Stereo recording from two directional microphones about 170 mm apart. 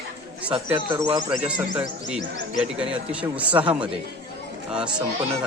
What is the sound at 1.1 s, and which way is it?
Speech, 30° right (ahead or behind).